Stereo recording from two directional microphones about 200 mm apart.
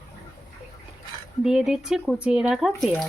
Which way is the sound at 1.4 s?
5° right (ahead or behind).